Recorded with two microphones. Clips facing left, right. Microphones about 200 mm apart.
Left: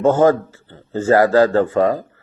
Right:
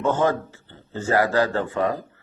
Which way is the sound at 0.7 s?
40° left (ahead or behind).